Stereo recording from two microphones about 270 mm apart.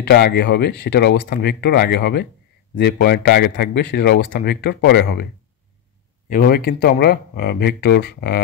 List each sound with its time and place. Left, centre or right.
0.0 s speech: left
6.2 s speech: left